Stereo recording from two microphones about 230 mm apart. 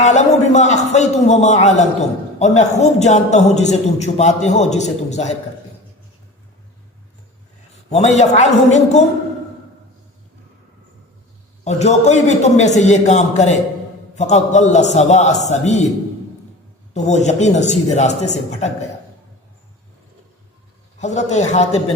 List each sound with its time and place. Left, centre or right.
0.0 s a man's voice: left
7.7 s a man's voice: left
11.6 s a man's voice: left
16.9 s a man's voice: left
21.0 s a man's voice: left